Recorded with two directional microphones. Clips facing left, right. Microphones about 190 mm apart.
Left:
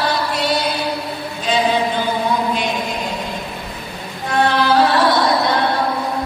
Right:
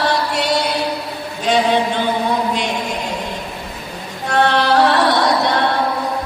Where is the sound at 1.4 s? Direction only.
70° right (ahead or behind).